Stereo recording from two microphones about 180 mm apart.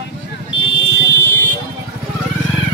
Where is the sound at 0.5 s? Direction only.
85° left.